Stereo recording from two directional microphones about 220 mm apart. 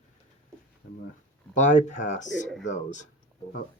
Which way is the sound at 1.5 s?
35° left (ahead or behind).